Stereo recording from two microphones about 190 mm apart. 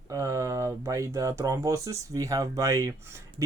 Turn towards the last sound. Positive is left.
turn(degrees=-15)  # may be behind; listen again after turning